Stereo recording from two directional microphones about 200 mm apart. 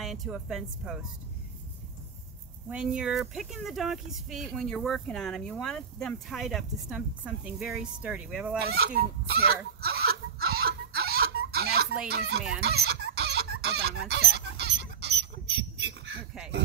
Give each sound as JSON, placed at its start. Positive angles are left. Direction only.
{"t": 0.0, "sound": "speech", "side_deg": 0}
{"t": 2.7, "sound": "speech", "side_deg": -5}
{"t": 8.6, "sound": "chicken", "side_deg": -50}
{"t": 12.6, "sound": "fowl", "side_deg": -55}
{"t": 14.3, "sound": "a sound", "side_deg": -60}